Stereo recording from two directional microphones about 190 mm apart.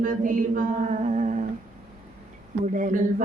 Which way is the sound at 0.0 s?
45° right (ahead or behind).